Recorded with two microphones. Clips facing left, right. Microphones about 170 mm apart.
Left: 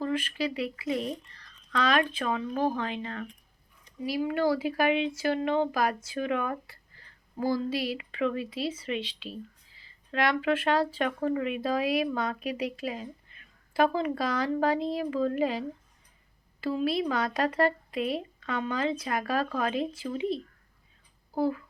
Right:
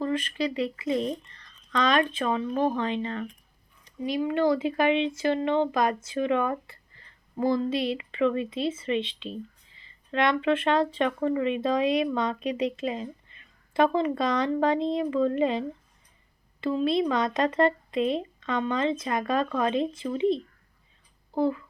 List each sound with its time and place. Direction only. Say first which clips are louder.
0.0 s a woman's voice: right 2 dB; 10° left (ahead or behind)
16.8 s a woman's voice: right 4 dB; 5° left (ahead or behind)
21.3 s a woman's voice: right 2 dB; 5° left (ahead or behind)